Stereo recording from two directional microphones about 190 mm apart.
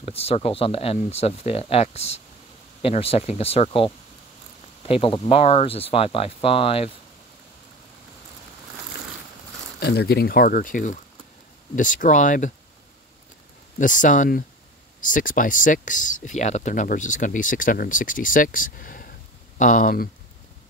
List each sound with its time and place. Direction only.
0.0 s speech: 30° left (ahead or behind)
9.8 s speech: 60° left (ahead or behind); by 12.5 s 40° left (ahead or behind)
13.7 s speech: 45° left (ahead or behind)